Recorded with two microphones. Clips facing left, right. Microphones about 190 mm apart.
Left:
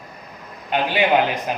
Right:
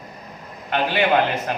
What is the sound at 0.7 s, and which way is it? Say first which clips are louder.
Speech: left 1 dB; 15° left (ahead or behind).